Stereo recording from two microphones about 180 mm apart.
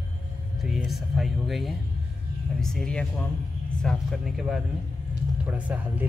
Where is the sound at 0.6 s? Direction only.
Centre (ahead or behind).